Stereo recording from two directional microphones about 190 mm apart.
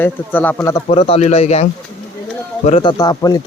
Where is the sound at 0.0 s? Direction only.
10° left (ahead or behind).